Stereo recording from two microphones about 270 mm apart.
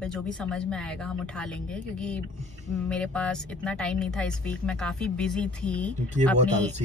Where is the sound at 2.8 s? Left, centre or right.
Centre.